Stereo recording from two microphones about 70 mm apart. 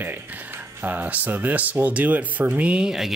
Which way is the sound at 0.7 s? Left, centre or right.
Right.